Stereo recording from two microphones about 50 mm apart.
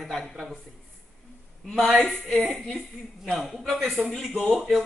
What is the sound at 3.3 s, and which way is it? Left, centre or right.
A woman's voice, centre.